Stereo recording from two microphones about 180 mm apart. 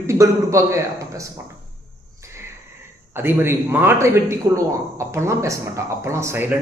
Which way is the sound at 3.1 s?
10° right (ahead or behind).